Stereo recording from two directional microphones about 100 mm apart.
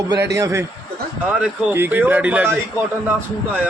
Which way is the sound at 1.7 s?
20° right (ahead or behind).